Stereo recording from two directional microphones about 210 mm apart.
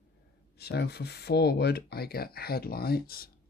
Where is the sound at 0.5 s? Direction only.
50° left (ahead or behind).